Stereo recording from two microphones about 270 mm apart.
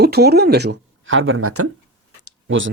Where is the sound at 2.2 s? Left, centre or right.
Right.